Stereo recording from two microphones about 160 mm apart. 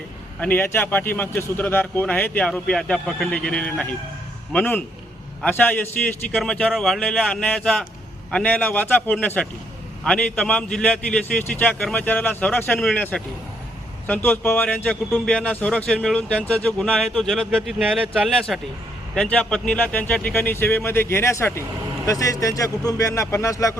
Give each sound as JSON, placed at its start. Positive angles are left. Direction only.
{"t": 0.3, "sound": "a man's voice", "side_deg": 10}